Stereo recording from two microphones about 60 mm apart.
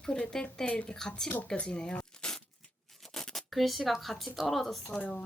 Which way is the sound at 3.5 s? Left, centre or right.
Centre.